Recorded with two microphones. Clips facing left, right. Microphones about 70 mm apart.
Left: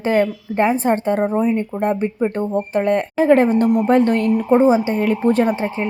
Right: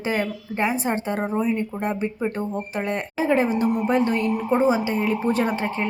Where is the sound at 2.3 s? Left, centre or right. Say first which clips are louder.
Left 8 dB; left.